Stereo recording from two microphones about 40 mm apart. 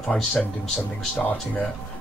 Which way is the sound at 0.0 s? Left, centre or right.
Left.